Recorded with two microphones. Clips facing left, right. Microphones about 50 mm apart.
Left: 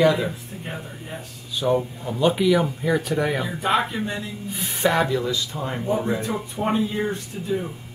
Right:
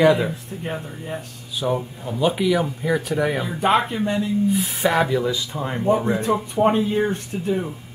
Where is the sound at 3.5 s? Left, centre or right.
Right.